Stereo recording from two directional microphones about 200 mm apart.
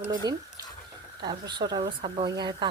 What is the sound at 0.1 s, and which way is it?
Speech, 20° right (ahead or behind).